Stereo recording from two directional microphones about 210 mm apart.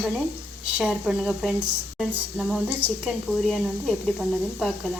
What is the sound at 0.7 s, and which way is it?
Speech, 5° right (ahead or behind).